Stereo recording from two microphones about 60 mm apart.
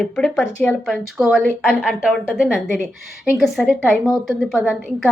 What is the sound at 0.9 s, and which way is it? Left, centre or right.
Speech, centre.